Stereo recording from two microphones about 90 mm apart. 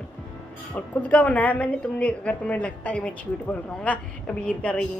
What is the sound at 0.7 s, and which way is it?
A woman's voice, 15° left (ahead or behind).